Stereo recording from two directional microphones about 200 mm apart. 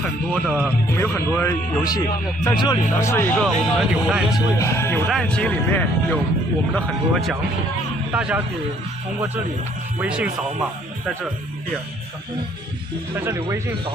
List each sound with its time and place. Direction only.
0.0 s speech: 5° left (ahead or behind)
3.4 s speech: centre (ahead or behind)
4.5 s speech: 15° left (ahead or behind); by 8.4 s 10° right (ahead or behind)
10.0 s speech: 5° right (ahead or behind)
13.1 s speech: 10° right (ahead or behind)